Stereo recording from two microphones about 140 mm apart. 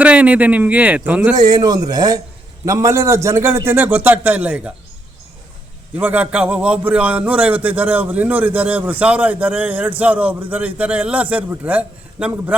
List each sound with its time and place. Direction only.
0.0 s a man's voice: 10° right (ahead or behind)
1.4 s a man's voice: 30° right (ahead or behind); by 4.7 s 10° right (ahead or behind)
6.0 s a man's voice: 10° right (ahead or behind)